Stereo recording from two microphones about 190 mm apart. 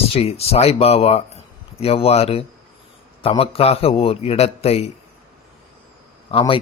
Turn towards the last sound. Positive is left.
turn(degrees=25)  # may be behind; listen again after turning